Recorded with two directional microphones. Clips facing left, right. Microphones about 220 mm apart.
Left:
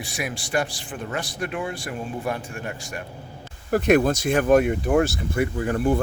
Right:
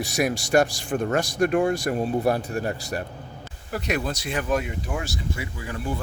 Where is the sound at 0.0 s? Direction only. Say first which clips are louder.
Right 7 dB; 40° right (ahead or behind).